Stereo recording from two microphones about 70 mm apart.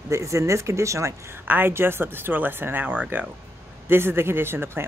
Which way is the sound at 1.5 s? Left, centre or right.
Right.